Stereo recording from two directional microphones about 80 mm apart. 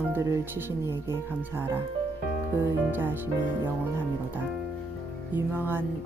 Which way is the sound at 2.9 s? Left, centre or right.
Right.